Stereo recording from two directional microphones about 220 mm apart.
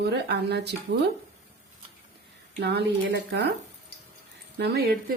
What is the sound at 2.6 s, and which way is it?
Speech, 50° right (ahead or behind).